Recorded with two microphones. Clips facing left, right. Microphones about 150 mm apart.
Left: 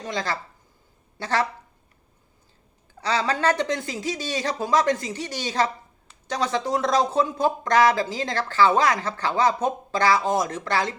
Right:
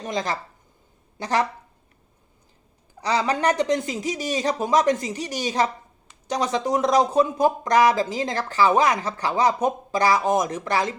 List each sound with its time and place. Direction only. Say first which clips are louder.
0.0 s a woman's voice: right 2 dB; 20° right (ahead or behind)
3.0 s speech: right 1 dB; 15° right (ahead or behind)